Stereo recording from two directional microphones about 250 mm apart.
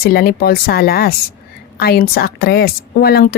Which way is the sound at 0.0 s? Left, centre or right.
Left.